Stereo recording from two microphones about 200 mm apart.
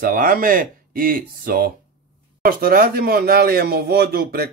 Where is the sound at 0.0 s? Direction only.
45° right (ahead or behind).